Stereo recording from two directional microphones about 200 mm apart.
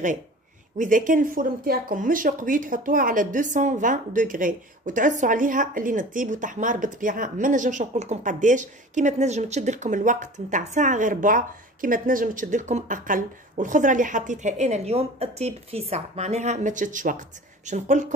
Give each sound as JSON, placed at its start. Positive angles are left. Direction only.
{"t": 0.7, "sound": "speech", "side_deg": -40}